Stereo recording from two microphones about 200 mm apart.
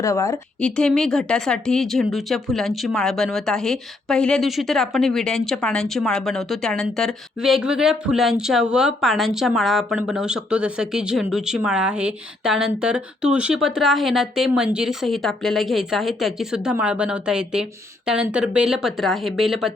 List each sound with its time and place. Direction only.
0.0 s speech: 15° left (ahead or behind); by 19.7 s centre (ahead or behind)